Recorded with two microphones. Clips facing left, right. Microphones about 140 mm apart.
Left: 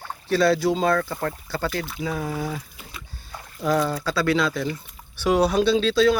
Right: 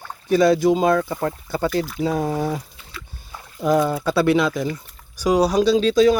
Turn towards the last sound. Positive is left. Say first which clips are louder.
# right 3 dB
turn(degrees=-10)  # may be behind; listen again after turning